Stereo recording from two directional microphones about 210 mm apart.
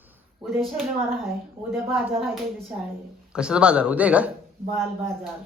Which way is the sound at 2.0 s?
Centre (ahead or behind).